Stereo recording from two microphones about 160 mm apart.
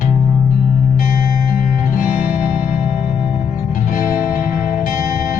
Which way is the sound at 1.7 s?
55° left (ahead or behind).